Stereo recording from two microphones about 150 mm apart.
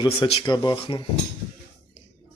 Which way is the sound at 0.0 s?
30° left (ahead or behind).